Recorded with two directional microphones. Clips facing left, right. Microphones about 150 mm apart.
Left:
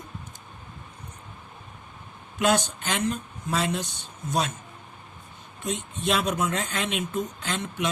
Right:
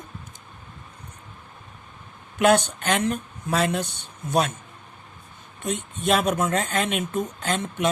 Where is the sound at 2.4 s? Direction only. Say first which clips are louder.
Right 5 dB; 55° right (ahead or behind).